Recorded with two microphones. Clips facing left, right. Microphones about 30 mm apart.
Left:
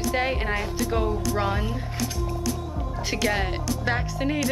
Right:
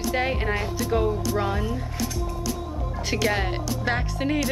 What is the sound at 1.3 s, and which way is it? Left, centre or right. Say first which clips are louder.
Speech: even; centre.